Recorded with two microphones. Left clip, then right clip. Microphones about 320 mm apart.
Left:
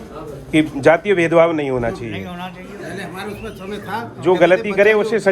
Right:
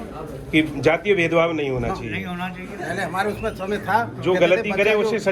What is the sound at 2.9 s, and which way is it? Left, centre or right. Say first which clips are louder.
A man's voice: right 7 dB; centre.